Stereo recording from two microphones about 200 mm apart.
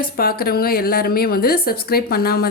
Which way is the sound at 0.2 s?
50° left (ahead or behind).